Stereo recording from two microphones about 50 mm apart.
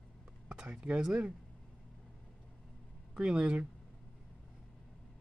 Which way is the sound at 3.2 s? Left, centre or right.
Centre.